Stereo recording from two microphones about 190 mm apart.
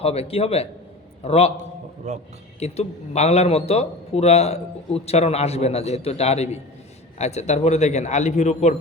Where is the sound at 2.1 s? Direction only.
35° right (ahead or behind).